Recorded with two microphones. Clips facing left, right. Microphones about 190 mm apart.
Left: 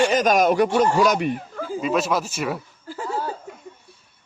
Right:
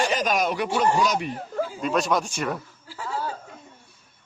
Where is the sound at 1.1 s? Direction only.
55° left (ahead or behind).